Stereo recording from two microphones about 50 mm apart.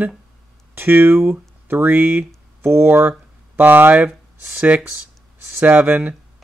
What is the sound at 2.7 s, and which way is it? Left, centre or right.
Speech, right.